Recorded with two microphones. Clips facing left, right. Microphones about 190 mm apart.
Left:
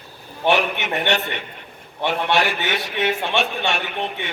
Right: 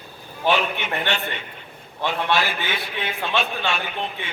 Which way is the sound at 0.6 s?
70° left (ahead or behind).